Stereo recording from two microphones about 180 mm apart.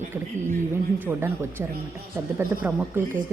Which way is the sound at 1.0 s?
10° right (ahead or behind).